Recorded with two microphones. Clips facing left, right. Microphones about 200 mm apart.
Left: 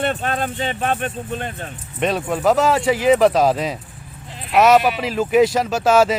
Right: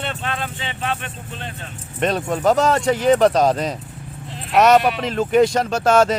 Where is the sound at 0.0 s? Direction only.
45° left (ahead or behind).